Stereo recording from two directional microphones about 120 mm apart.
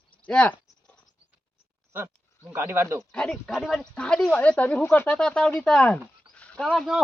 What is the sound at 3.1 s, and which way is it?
Speech, 5° left (ahead or behind).